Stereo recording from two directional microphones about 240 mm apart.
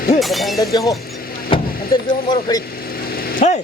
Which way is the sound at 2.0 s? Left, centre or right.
Left.